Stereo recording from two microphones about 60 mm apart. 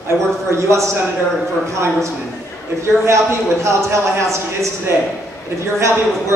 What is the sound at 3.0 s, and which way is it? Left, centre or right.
Speech, right.